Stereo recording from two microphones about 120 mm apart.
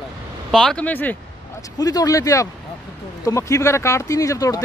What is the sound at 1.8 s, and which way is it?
Speech, 30° left (ahead or behind).